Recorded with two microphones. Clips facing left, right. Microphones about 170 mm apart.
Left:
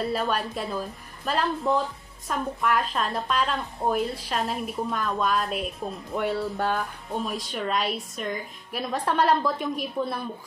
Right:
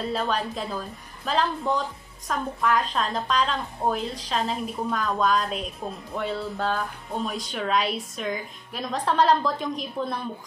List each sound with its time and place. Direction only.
0.1 s a woman's voice: centre (ahead or behind)
6.4 s music: 15° left (ahead or behind)
7.1 s a woman's voice: centre (ahead or behind)